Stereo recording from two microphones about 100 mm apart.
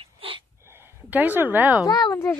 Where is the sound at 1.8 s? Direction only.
40° left (ahead or behind).